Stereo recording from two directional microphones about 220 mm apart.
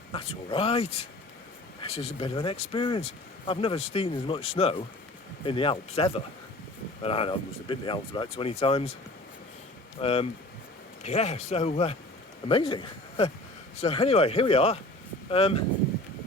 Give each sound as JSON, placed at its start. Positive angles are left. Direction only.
{"t": 0.1, "sound": "speech", "side_deg": 25}
{"t": 10.0, "sound": "speech", "side_deg": 25}